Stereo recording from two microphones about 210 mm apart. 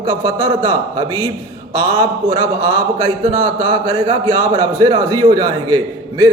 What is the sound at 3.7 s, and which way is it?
A man's voice, 25° right (ahead or behind).